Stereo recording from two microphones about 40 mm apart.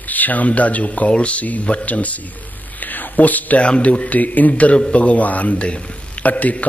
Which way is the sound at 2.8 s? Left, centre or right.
Left.